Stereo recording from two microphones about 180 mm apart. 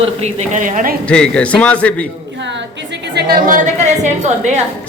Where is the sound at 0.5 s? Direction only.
50° right (ahead or behind).